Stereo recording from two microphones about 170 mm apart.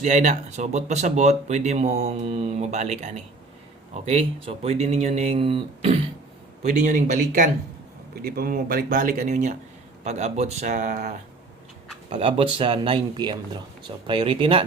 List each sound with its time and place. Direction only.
0.0 s speech: 45° right (ahead or behind)
6.6 s speech: 45° right (ahead or behind)
8.1 s a man's voice: 60° right (ahead or behind); by 11.1 s 45° right (ahead or behind)
12.1 s speech: 35° right (ahead or behind)